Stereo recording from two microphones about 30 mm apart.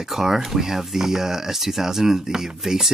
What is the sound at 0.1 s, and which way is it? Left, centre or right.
Speech, centre.